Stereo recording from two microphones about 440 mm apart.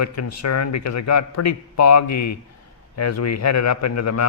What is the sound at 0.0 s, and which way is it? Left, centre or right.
A man's voice, left.